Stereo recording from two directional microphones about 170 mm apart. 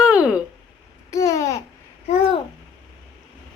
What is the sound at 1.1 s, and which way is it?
Babbling, 20° left (ahead or behind).